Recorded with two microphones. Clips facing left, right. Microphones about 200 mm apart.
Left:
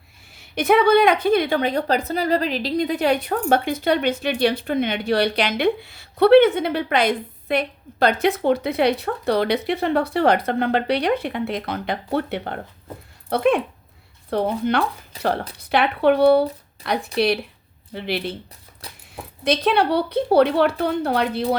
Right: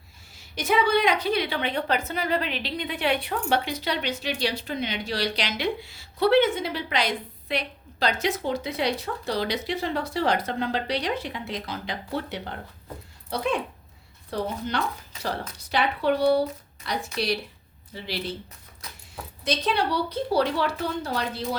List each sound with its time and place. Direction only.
0.3 s a woman's voice: 60° left (ahead or behind)
15.1 s a woman's voice: 35° left (ahead or behind)
15.5 s a woman's voice: 60° left (ahead or behind)
18.8 s dog: 30° left (ahead or behind)
19.5 s a woman's voice: 60° left (ahead or behind)